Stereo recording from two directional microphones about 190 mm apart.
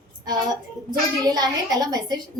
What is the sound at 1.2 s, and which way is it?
Speech, 20° right (ahead or behind).